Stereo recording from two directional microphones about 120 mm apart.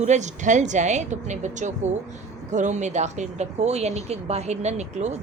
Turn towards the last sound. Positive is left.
turn(degrees=-70)  # may be behind; listen again after turning